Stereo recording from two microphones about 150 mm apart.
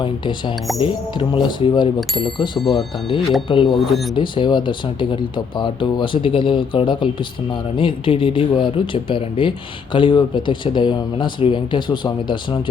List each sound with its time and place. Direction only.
0.0 s speech: 30° left (ahead or behind)
2.0 s speech: centre (ahead or behind)
3.5 s speech: 35° left (ahead or behind)